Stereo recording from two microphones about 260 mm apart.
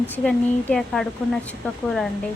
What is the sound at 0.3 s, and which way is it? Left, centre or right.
A woman's voice, centre.